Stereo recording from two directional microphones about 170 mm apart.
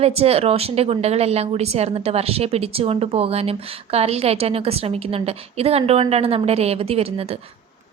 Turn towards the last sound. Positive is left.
turn(degrees=-35)  # may be behind; listen again after turning